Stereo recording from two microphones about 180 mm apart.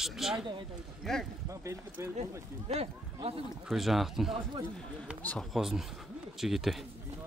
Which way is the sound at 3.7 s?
Centre (ahead or behind).